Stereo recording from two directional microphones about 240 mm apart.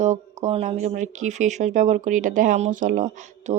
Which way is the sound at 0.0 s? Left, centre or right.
Right.